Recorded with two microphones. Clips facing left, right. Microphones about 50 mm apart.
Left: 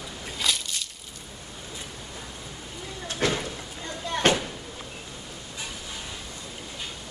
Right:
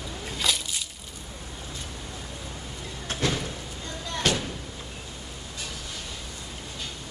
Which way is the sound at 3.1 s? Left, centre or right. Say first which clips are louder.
Left 2 dB; left.